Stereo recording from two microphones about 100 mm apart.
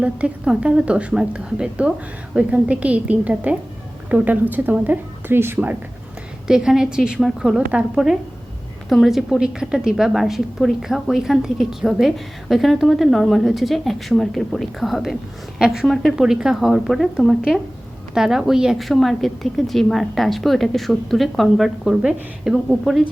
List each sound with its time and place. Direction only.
0.0 s a woman's voice: 10° right (ahead or behind)
6.5 s a woman's voice: 5° right (ahead or behind)